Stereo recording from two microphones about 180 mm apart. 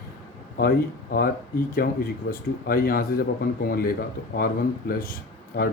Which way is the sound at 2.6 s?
55° left (ahead or behind).